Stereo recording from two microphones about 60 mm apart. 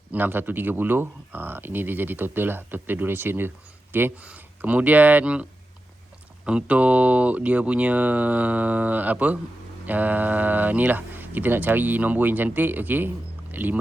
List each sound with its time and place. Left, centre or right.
0.1 s a man's voice: right
4.2 s a man's voice: right